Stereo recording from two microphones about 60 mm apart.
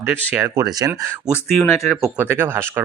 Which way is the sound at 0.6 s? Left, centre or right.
Right.